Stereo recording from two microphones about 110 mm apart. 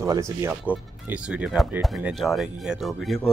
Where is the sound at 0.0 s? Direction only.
30° right (ahead or behind).